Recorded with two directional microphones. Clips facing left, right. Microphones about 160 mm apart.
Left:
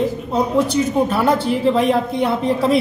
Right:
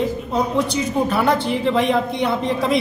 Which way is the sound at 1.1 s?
Centre (ahead or behind).